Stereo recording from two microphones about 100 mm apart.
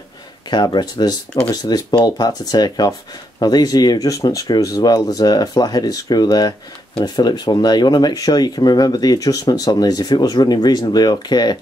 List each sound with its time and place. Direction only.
0.5 s speech: 45° left (ahead or behind)